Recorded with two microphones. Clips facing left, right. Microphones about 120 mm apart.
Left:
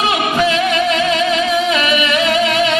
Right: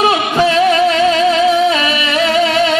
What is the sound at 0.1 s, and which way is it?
Music, 35° right (ahead or behind).